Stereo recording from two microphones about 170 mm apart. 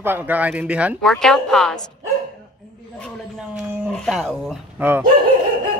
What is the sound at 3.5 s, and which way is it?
Speech, centre (ahead or behind).